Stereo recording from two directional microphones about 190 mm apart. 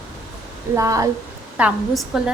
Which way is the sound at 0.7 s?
15° right (ahead or behind).